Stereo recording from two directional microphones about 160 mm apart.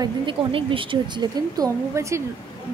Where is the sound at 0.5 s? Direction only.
35° right (ahead or behind); by 2.2 s 20° right (ahead or behind).